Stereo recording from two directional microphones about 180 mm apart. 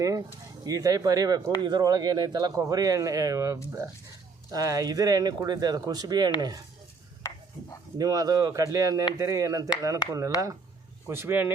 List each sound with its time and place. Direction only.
0.0 s speech: 20° right (ahead or behind)
7.2 s chopping: 15° left (ahead or behind)
7.9 s speech: 20° right (ahead or behind)